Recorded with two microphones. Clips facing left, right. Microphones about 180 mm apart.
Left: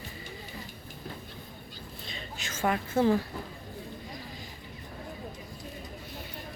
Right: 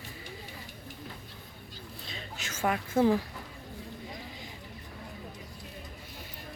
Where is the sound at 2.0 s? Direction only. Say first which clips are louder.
Left 1 dB; 5° right (ahead or behind).